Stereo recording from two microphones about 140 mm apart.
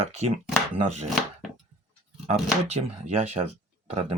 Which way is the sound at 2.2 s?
50° right (ahead or behind).